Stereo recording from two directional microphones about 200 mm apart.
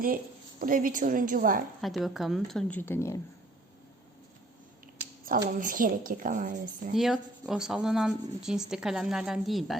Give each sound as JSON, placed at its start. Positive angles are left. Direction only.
{"t": 0.6, "sound": "a woman's voice", "side_deg": -45}
{"t": 1.8, "sound": "speech", "side_deg": 0}
{"t": 5.5, "sound": "a woman's voice", "side_deg": -45}
{"t": 6.9, "sound": "speech", "side_deg": 0}